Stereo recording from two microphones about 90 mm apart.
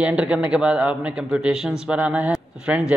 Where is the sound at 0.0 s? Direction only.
10° right (ahead or behind).